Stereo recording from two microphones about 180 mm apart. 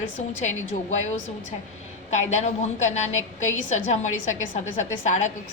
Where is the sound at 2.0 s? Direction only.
40° left (ahead or behind).